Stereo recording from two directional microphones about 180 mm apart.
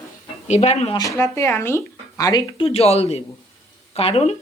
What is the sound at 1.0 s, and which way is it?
Speech, 15° left (ahead or behind).